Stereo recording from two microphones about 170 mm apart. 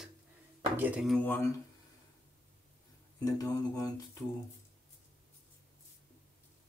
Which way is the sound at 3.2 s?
20° left (ahead or behind).